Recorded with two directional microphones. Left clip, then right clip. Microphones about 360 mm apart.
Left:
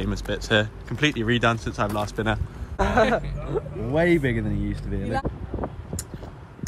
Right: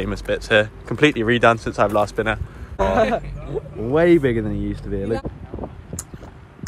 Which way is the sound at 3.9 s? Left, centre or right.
Centre.